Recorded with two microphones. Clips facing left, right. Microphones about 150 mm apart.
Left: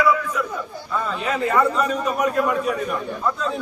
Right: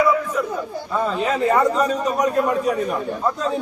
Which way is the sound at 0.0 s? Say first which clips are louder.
Right 1 dB; 35° right (ahead or behind).